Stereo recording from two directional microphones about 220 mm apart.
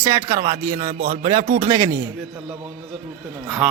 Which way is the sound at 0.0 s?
15° right (ahead or behind).